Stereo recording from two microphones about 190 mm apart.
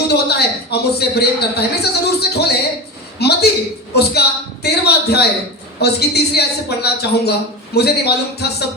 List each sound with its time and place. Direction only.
0.1 s a man's voice: 60° left (ahead or behind)
3.2 s a sound: 60° left (ahead or behind)
3.9 s a man's voice: 60° left (ahead or behind)